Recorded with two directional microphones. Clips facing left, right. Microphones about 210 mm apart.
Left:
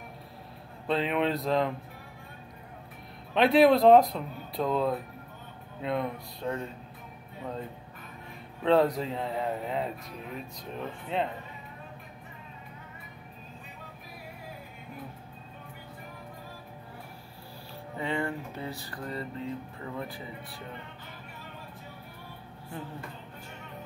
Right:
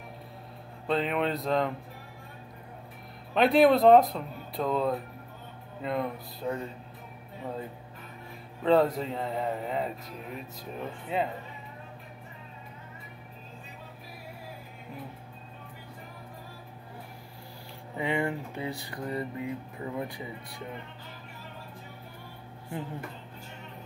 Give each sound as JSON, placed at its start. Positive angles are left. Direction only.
{"t": 0.8, "sound": "speech", "side_deg": 0}
{"t": 3.3, "sound": "speech", "side_deg": 0}
{"t": 8.6, "sound": "speech", "side_deg": 0}
{"t": 17.9, "sound": "speech", "side_deg": -15}